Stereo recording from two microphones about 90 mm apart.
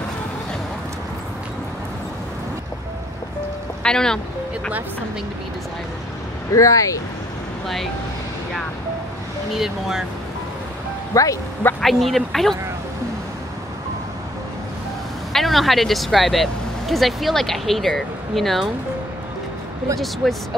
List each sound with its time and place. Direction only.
3.8 s speech: 10° left (ahead or behind)
6.5 s speech: 40° left (ahead or behind)
7.6 s speech: centre (ahead or behind)
9.5 s speech: 5° right (ahead or behind)
11.1 s speech: 40° left (ahead or behind)
11.8 s speech: centre (ahead or behind)
15.3 s speech: centre (ahead or behind)
20.2 s speech: centre (ahead or behind)